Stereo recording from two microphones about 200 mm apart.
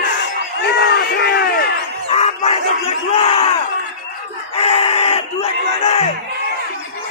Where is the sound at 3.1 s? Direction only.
30° left (ahead or behind).